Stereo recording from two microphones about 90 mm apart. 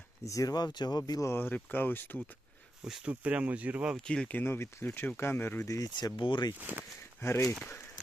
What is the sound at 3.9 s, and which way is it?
Speech, 10° left (ahead or behind).